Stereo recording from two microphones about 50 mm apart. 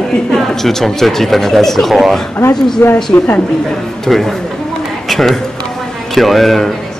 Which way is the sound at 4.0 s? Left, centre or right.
Centre.